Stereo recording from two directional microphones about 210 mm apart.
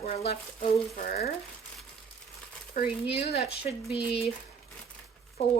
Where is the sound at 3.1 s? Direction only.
30° left (ahead or behind).